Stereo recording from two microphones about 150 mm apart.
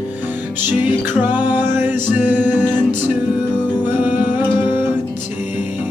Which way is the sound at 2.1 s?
55° left (ahead or behind).